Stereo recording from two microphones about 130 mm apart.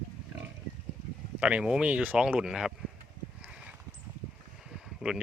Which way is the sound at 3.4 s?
10° right (ahead or behind).